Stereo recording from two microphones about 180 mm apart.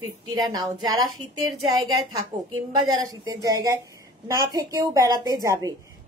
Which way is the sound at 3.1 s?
20° right (ahead or behind).